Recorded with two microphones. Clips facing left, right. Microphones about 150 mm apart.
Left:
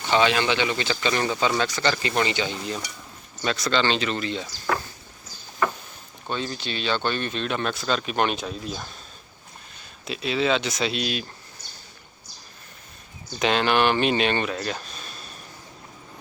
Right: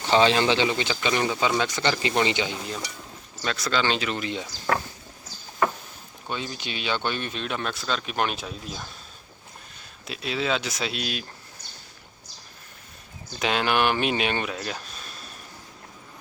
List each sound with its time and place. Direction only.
0.1 s speech: 30° right (ahead or behind); by 1.6 s 10° right (ahead or behind)
1.6 s speech: 20° right (ahead or behind)
3.4 s speech: centre (ahead or behind)
6.2 s speech: 10° right (ahead or behind)
10.1 s speech: centre (ahead or behind)
13.4 s speech: 5° right (ahead or behind)